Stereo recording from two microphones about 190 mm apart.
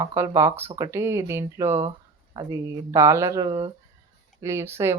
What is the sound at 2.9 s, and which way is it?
Speech, 15° right (ahead or behind).